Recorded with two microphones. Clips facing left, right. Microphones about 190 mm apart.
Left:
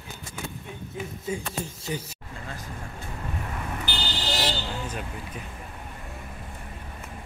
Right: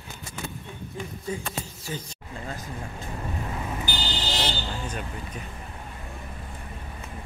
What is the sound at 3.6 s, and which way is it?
Vehicle, 15° right (ahead or behind).